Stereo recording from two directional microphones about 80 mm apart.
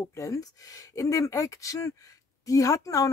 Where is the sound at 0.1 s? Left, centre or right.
Left.